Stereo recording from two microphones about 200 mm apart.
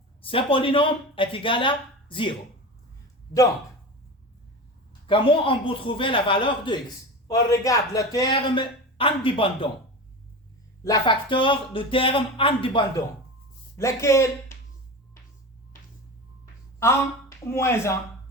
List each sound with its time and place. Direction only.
0.2 s speech: 25° left (ahead or behind)
5.0 s speech: 25° left (ahead or behind)
10.8 s speech: 20° left (ahead or behind)
13.7 s speech: 15° left (ahead or behind)
16.8 s speech: 15° left (ahead or behind)